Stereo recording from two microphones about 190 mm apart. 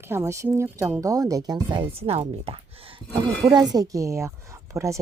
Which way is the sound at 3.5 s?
20° right (ahead or behind).